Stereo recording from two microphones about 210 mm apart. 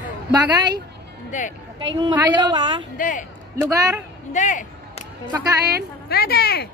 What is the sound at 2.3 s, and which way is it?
Speech, 20° right (ahead or behind).